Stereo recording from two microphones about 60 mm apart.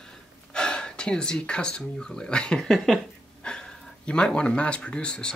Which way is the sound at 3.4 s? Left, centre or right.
Centre.